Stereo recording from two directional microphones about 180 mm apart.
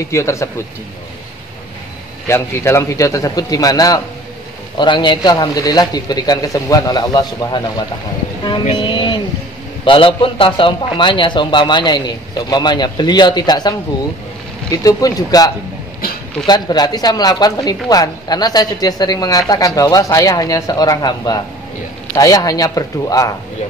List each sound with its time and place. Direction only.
0.1 s a man's voice: 15° left (ahead or behind)
2.2 s a man's voice: 15° left (ahead or behind)
8.7 s a sound: 25° left (ahead or behind)
9.8 s a woman's voice: 30° left (ahead or behind)